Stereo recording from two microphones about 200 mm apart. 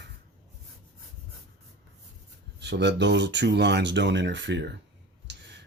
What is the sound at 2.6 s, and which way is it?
Speech, 60° right (ahead or behind).